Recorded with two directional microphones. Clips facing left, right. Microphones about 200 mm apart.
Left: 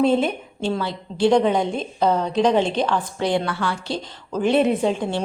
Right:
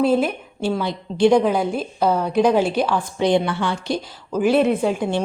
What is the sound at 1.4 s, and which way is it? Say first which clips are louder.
A woman's voice: right 1 dB; 5° right (ahead or behind).